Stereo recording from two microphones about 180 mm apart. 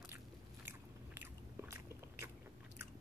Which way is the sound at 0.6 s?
10° right (ahead or behind).